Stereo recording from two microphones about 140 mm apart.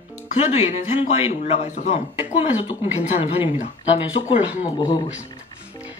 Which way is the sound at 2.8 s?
55° left (ahead or behind).